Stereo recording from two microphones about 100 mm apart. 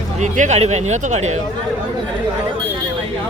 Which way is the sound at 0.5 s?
90° right.